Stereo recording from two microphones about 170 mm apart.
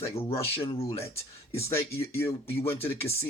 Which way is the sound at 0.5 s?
35° left (ahead or behind).